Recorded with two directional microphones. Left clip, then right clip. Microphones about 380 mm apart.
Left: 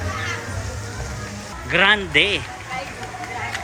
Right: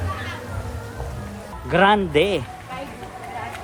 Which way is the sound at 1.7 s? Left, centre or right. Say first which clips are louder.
Even; centre.